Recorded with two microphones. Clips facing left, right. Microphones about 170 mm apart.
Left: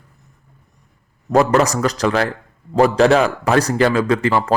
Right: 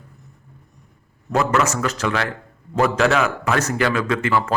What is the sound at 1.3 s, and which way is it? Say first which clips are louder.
A man's voice: left 5 dB; 35° left (ahead or behind).